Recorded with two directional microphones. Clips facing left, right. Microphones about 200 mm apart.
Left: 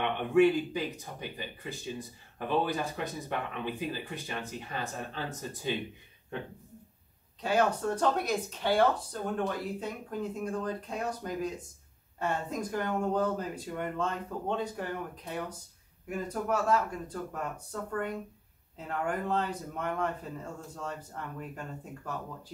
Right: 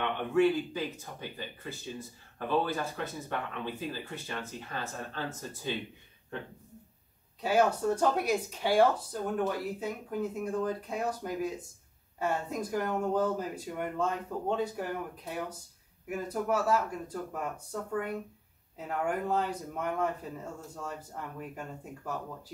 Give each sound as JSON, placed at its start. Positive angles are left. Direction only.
{"t": 0.0, "sound": "speech", "side_deg": 15}
{"t": 7.4, "sound": "speech", "side_deg": -5}